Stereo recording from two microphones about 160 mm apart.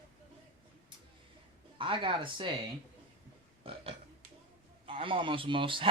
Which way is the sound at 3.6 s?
35° right (ahead or behind).